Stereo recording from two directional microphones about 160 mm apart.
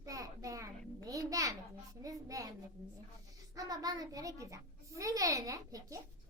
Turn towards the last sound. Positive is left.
turn(degrees=-20)  # may be behind; listen again after turning